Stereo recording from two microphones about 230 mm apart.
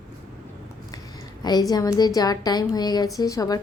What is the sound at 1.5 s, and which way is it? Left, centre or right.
A woman's voice, centre.